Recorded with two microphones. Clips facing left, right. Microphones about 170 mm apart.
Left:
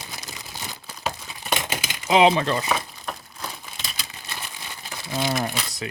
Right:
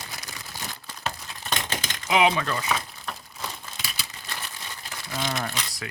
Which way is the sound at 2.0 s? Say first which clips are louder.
Left 5 dB; 30° left (ahead or behind).